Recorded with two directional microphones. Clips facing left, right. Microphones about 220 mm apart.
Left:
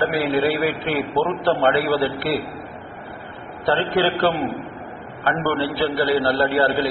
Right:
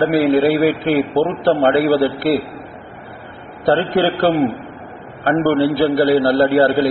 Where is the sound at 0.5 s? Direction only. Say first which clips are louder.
Right 7 dB; 40° right (ahead or behind).